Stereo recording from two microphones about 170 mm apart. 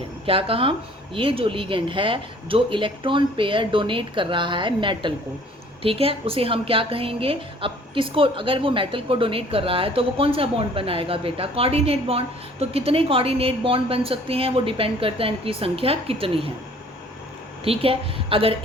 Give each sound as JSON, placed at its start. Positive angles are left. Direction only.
{"t": 0.3, "sound": "a woman's voice", "side_deg": -35}
{"t": 17.6, "sound": "a woman's voice", "side_deg": -35}